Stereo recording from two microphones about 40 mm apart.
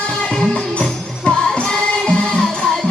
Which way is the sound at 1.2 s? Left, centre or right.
Centre.